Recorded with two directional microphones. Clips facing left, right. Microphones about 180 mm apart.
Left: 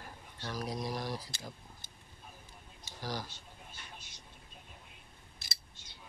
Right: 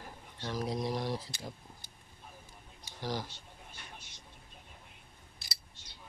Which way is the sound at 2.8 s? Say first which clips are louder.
Right 3 dB; 20° right (ahead or behind).